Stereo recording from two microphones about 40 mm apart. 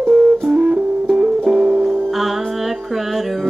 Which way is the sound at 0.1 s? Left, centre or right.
Right.